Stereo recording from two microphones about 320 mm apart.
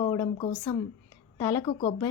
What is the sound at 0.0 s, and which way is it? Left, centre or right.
Speech, centre.